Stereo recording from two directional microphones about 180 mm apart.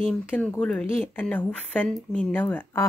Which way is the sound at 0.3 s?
5° left (ahead or behind).